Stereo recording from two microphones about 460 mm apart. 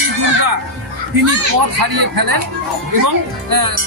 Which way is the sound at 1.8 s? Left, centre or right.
Right.